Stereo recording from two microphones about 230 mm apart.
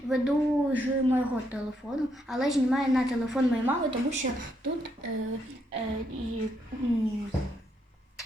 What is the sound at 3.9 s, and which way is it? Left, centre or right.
Speech, right.